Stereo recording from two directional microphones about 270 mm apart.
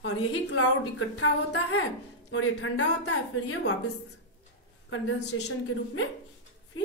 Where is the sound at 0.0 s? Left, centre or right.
Left.